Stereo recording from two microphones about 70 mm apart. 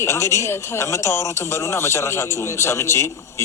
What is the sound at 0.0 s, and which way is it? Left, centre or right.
Speech, left.